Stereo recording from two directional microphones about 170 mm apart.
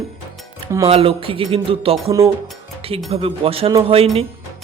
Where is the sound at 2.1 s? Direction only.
20° right (ahead or behind).